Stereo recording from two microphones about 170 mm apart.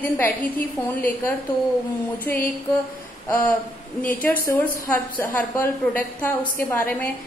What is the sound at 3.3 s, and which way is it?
A woman's voice, 10° left (ahead or behind).